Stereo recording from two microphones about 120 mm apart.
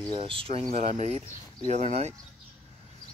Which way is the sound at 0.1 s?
50° right (ahead or behind).